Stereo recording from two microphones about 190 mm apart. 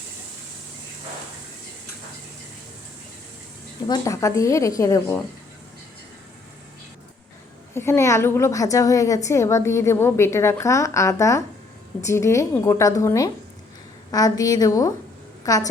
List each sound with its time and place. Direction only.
3.8 s a woman's voice: 20° left (ahead or behind)
7.7 s a woman's voice: 15° left (ahead or behind)